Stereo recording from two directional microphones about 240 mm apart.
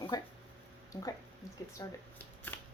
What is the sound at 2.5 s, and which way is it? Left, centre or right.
Shuffling cards, centre.